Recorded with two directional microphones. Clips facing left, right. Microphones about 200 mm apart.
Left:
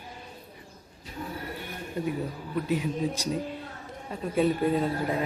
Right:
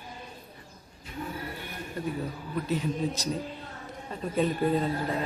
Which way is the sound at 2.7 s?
10° left (ahead or behind).